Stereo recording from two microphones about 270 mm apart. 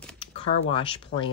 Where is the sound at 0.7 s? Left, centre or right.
Centre.